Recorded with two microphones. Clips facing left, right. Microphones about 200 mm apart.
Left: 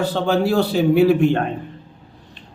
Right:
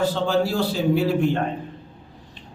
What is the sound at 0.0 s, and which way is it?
Speech, 60° left (ahead or behind).